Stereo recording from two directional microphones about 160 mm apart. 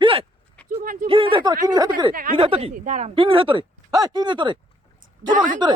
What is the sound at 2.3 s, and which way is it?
Speech, 35° right (ahead or behind).